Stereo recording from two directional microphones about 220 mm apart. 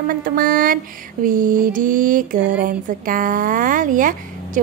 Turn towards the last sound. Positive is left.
turn(degrees=-35)  # may be behind; listen again after turning